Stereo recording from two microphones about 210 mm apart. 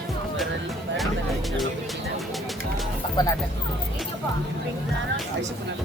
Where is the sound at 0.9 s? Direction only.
Centre (ahead or behind).